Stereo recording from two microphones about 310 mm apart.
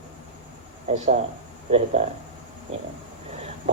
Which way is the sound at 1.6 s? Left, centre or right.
Right.